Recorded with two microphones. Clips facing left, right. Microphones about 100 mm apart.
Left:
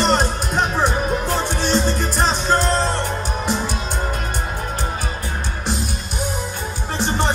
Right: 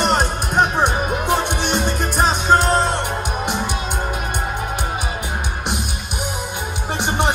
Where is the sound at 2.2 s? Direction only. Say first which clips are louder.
Right 4 dB; 10° right (ahead or behind).